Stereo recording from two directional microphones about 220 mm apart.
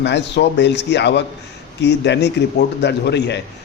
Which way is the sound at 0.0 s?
50° left (ahead or behind).